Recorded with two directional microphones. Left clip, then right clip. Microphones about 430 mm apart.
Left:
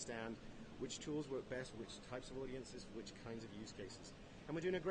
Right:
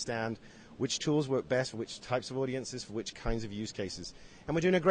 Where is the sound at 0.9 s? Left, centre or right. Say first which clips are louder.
Right 15 dB; right.